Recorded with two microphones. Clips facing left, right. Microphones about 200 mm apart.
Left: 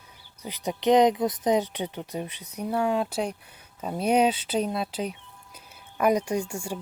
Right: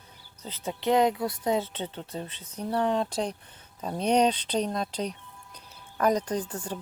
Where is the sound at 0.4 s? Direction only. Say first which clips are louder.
Left 4 dB; 15° left (ahead or behind).